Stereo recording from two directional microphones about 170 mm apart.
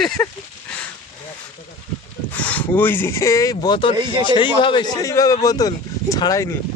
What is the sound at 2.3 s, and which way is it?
Speech, 10° left (ahead or behind).